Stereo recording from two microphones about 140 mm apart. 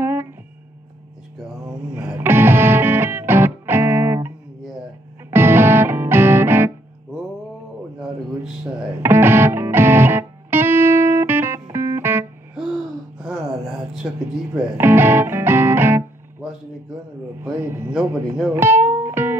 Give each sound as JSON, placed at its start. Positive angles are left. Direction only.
{"t": 0.0, "sound": "music", "side_deg": -15}
{"t": 2.0, "sound": "music", "side_deg": -15}
{"t": 5.3, "sound": "music", "side_deg": -15}
{"t": 9.0, "sound": "music", "side_deg": -15}
{"t": 14.0, "sound": "a sound", "side_deg": -5}
{"t": 14.5, "sound": "music", "side_deg": -15}
{"t": 17.4, "sound": "a man's voice", "side_deg": -15}
{"t": 18.5, "sound": "music", "side_deg": -15}